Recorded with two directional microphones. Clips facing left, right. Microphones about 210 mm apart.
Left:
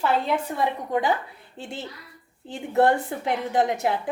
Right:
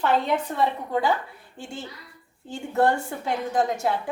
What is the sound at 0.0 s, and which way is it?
A woman's voice, 10° left (ahead or behind).